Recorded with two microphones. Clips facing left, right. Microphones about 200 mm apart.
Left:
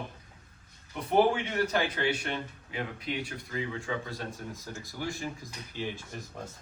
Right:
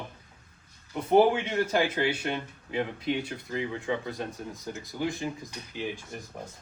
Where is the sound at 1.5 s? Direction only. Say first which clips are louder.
Right 3 dB; 20° right (ahead or behind).